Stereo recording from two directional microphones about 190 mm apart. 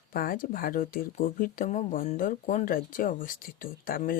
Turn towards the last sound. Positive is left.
turn(degrees=50)  # may be behind; listen again after turning